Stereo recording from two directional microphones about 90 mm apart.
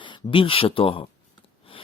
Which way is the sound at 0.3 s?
80° left.